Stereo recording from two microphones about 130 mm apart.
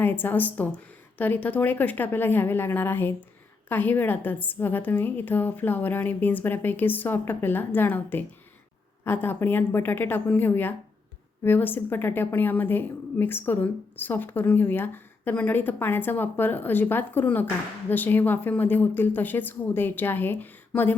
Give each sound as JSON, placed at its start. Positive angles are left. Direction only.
{"t": 0.0, "sound": "a woman's voice", "side_deg": 15}